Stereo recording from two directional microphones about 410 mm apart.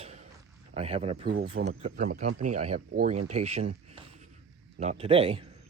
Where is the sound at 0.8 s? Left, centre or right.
Centre.